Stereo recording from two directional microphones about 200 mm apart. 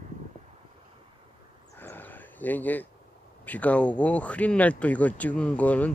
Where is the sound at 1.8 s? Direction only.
10° left (ahead or behind).